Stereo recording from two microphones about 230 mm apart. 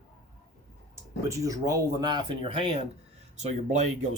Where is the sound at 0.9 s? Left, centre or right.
Centre; by 4.1 s right.